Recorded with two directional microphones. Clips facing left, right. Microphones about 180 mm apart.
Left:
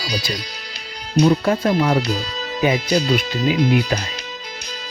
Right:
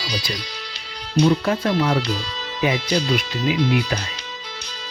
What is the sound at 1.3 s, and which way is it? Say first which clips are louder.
Speech: left 2 dB; 40° left (ahead or behind).